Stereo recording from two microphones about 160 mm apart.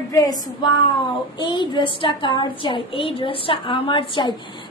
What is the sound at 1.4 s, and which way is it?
A woman's voice, 30° left (ahead or behind).